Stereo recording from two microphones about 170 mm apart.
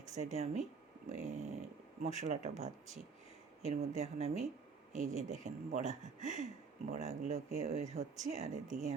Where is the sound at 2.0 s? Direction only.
45° right (ahead or behind).